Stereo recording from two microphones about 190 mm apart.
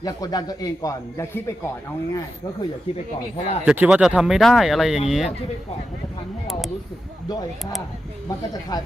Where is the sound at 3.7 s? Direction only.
5° right (ahead or behind).